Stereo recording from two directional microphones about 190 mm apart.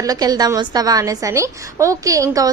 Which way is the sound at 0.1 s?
20° right (ahead or behind).